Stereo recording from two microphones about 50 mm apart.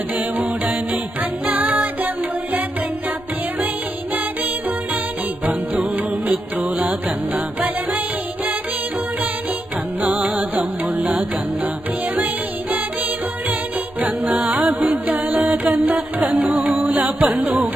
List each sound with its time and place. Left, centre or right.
0.3 s music: right
6.2 s music: right
10.0 s music: right
14.0 s music: right